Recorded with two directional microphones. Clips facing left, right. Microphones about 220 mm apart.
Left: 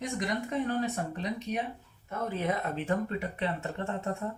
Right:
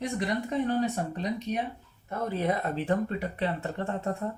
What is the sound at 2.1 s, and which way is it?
Speech, 35° right (ahead or behind).